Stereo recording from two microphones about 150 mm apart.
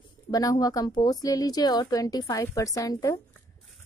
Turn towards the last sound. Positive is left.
turn(degrees=25)  # may be behind; listen again after turning